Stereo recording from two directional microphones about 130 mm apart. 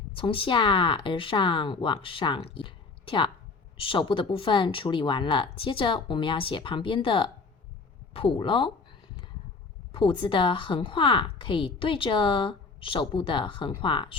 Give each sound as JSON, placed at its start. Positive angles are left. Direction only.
{"t": 0.2, "sound": "a woman's voice", "side_deg": 45}
{"t": 9.9, "sound": "a woman's voice", "side_deg": 40}